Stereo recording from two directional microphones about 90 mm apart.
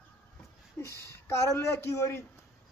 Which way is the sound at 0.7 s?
30° left (ahead or behind).